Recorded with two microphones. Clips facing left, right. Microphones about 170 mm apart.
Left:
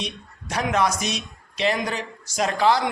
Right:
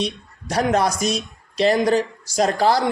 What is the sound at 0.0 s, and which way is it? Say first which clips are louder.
A man's voice: right 7 dB; 35° right (ahead or behind).